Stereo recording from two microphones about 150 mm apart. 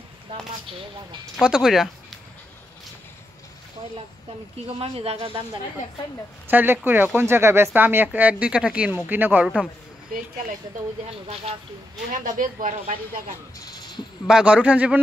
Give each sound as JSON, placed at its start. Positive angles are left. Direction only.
{"t": 1.3, "sound": "speech", "side_deg": -5}
{"t": 4.7, "sound": "speech", "side_deg": -40}
{"t": 6.5, "sound": "speech", "side_deg": -15}
{"t": 11.1, "sound": "speech", "side_deg": -40}
{"t": 12.1, "sound": "speech", "side_deg": -60}
{"t": 13.7, "sound": "a sound", "side_deg": 30}
{"t": 14.2, "sound": "speech", "side_deg": -5}